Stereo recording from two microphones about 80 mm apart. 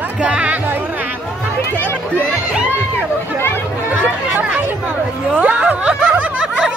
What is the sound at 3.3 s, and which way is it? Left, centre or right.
Speech, left.